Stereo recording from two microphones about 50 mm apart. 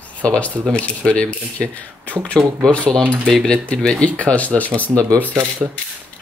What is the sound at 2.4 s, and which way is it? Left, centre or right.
Speech, centre.